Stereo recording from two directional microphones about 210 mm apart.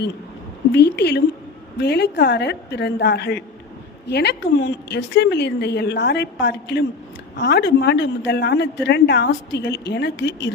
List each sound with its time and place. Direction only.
0.7 s a woman's voice: 55° left (ahead or behind)